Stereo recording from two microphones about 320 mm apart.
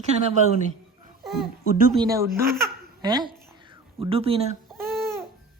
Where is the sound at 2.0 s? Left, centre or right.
Centre.